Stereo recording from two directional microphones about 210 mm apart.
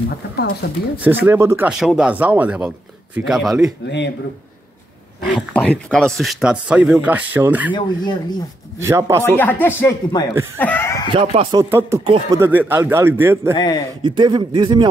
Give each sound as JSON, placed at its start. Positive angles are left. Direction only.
{"t": 0.6, "sound": "speech", "side_deg": 50}
{"t": 0.9, "sound": "a man's voice", "side_deg": -10}
{"t": 5.3, "sound": "a man's voice", "side_deg": 5}
{"t": 7.7, "sound": "speech", "side_deg": 20}
{"t": 8.7, "sound": "speech", "side_deg": -15}
{"t": 9.2, "sound": "speech", "side_deg": 10}
{"t": 10.6, "sound": "snicker", "side_deg": 10}
{"t": 11.1, "sound": "speech", "side_deg": -25}
{"t": 12.4, "sound": "speech", "side_deg": -10}
{"t": 13.6, "sound": "speech", "side_deg": 20}
{"t": 14.0, "sound": "speech", "side_deg": -20}